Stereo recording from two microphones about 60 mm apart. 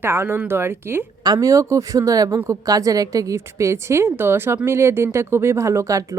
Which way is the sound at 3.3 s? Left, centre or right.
Right.